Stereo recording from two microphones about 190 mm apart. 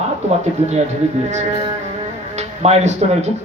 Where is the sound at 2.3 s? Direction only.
35° right (ahead or behind).